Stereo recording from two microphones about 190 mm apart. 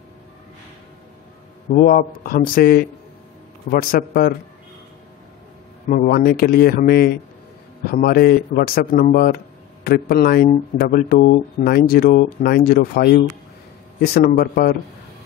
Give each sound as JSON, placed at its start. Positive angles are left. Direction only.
{"t": 1.7, "sound": "speech", "side_deg": 50}
{"t": 5.9, "sound": "speech", "side_deg": 45}